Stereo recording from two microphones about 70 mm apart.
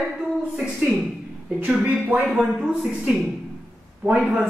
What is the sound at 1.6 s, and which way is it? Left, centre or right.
Speech, centre.